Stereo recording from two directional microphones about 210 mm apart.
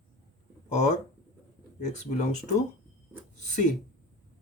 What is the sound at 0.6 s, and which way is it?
Speech, 35° left (ahead or behind).